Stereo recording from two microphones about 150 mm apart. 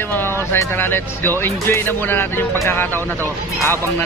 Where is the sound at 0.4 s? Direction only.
15° left (ahead or behind).